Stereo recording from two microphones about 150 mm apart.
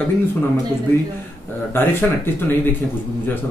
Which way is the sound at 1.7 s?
15° left (ahead or behind).